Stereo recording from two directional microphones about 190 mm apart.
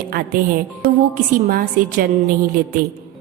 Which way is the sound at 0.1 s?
50° right (ahead or behind).